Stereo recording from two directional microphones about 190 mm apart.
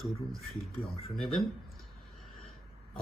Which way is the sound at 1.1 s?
Centre (ahead or behind).